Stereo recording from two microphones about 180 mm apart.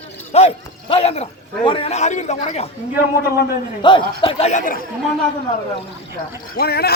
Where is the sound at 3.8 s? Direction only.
25° left (ahead or behind); by 4.8 s 45° left (ahead or behind).